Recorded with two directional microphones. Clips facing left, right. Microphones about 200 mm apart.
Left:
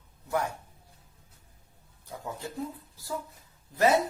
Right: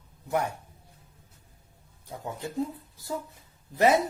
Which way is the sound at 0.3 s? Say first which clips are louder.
Right 2 dB; 20° right (ahead or behind).